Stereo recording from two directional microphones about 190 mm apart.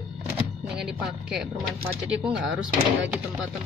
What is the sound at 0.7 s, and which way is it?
A woman's voice, 5° right (ahead or behind).